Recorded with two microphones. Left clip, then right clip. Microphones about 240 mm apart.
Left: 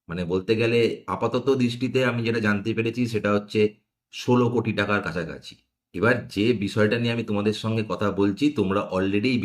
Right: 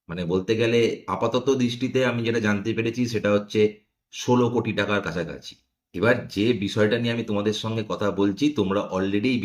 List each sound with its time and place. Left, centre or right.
0.1 s a man's voice: centre